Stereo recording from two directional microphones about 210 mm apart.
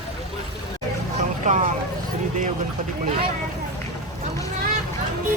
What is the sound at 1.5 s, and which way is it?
Speech, 35° right (ahead or behind).